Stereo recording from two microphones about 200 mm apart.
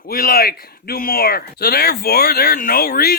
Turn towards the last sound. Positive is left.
turn(degrees=50)  # may be behind; listen again after turning